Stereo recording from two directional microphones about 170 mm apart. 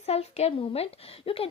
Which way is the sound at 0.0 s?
40° left (ahead or behind).